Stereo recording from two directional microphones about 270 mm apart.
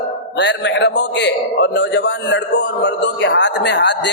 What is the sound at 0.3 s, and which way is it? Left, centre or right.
A man's voice, left.